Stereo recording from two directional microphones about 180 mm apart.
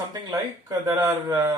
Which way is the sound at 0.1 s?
20° right (ahead or behind).